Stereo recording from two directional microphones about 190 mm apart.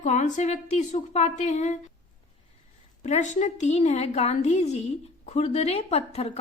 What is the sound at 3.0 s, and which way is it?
A woman's voice, 40° left (ahead or behind).